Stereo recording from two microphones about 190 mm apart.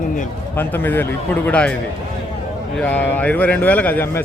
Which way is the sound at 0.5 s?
10° left (ahead or behind).